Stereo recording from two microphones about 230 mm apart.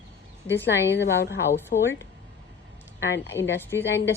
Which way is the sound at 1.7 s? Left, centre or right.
Left.